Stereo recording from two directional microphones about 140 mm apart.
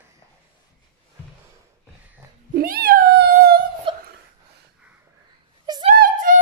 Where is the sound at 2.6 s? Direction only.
90° right.